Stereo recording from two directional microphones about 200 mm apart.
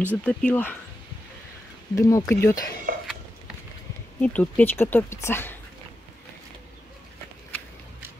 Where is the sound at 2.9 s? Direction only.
45° right (ahead or behind).